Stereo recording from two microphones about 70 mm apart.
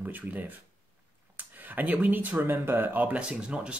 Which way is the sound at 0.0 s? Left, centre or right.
Right.